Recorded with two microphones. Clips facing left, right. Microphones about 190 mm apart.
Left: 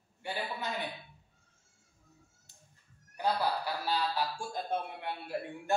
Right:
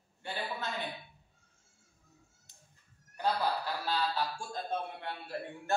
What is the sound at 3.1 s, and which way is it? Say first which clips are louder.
Speech: left 1 dB; 10° left (ahead or behind).